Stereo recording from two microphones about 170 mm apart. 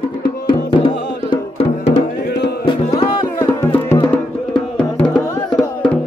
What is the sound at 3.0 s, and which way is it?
Music, 20° left (ahead or behind).